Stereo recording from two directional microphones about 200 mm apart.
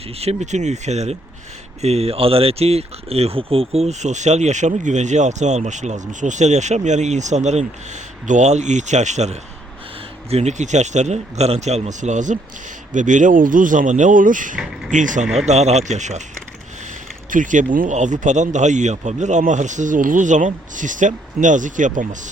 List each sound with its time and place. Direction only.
0.2 s speech: 35° right (ahead or behind)
14.5 s speech: 5° right (ahead or behind)
14.8 s speech: 40° right (ahead or behind)
17.3 s speech: 40° right (ahead or behind)